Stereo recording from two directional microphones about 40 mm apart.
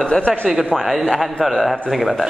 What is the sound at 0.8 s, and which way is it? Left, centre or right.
Speech, centre.